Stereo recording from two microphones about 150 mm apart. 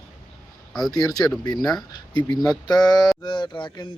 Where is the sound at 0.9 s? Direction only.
25° left (ahead or behind).